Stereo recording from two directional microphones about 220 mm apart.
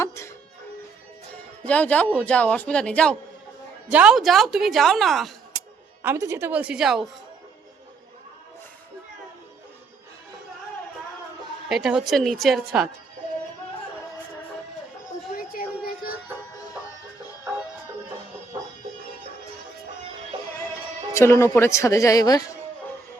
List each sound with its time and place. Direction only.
0.0 s music: 10° left (ahead or behind)
1.3 s speech: 5° left (ahead or behind)
6.0 s speech: 10° right (ahead or behind)
11.7 s speech: centre (ahead or behind)
15.3 s a sound: 40° left (ahead or behind)
21.1 s speech: 10° left (ahead or behind)